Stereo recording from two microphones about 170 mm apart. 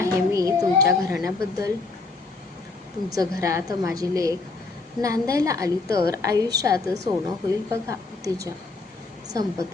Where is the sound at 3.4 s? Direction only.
20° right (ahead or behind).